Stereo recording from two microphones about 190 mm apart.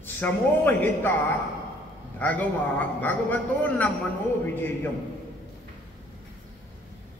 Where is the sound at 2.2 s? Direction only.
10° left (ahead or behind).